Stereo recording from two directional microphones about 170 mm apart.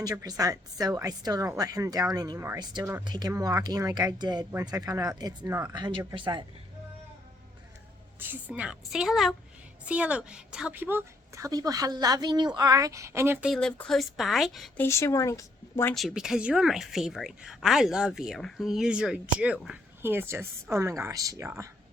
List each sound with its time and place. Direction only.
0.0 s speech: 20° right (ahead or behind)
8.2 s a woman's voice: 10° right (ahead or behind)
13.5 s a woman's voice: 5° left (ahead or behind)
14.8 s speech: 15° left (ahead or behind)
16.0 s a woman's voice: centre (ahead or behind)